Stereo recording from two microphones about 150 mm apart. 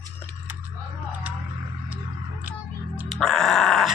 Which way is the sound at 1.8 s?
10° right (ahead or behind).